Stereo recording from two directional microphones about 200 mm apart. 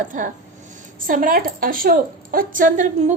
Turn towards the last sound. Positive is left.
turn(degrees=-40)  # may be behind; listen again after turning